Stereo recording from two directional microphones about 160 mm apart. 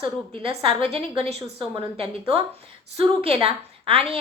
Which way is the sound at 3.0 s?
40° right (ahead or behind).